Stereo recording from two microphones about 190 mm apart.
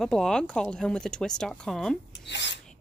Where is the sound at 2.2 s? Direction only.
65° left (ahead or behind).